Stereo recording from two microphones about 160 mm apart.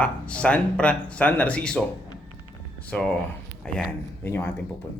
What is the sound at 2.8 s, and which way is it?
Speech, 5° left (ahead or behind).